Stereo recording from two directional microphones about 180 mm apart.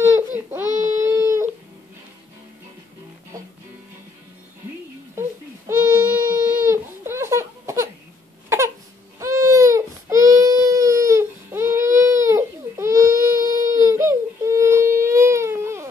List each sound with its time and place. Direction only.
0.5 s child singing: 15° right (ahead or behind)
0.9 s a sound: 15° right (ahead or behind)
5.7 s baby cry: 15° right (ahead or behind)
8.5 s crying: 15° right (ahead or behind)
9.2 s baby cry: 15° right (ahead or behind)